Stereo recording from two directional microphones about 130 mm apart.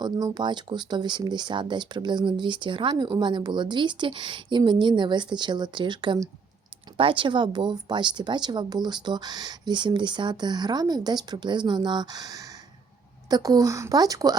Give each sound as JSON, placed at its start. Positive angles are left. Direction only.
{"t": 0.0, "sound": "speech", "side_deg": -30}